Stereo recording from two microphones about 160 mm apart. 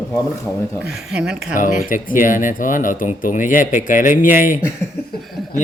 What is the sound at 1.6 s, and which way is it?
Speech, 55° left (ahead or behind).